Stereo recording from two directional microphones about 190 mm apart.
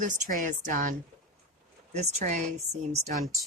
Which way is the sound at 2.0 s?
35° right (ahead or behind).